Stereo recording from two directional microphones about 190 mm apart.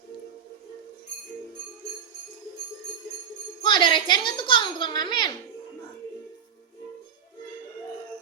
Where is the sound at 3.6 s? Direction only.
25° left (ahead or behind).